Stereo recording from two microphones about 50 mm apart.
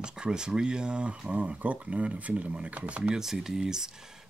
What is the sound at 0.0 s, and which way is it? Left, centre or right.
Speech, centre.